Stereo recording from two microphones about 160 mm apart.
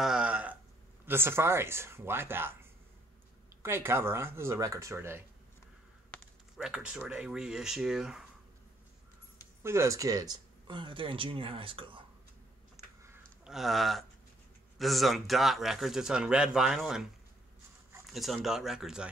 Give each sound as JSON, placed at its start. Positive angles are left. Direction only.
{"t": 0.0, "sound": "a sound", "side_deg": -5}
{"t": 1.0, "sound": "speech", "side_deg": -15}
{"t": 6.5, "sound": "a man's voice", "side_deg": -5}
{"t": 9.6, "sound": "speech", "side_deg": -15}
{"t": 13.4, "sound": "a sound", "side_deg": 0}
{"t": 14.8, "sound": "a man's voice", "side_deg": 0}
{"t": 18.1, "sound": "a man's voice", "side_deg": 0}